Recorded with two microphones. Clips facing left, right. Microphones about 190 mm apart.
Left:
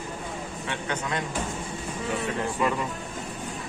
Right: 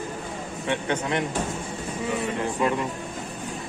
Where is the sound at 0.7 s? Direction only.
25° right (ahead or behind).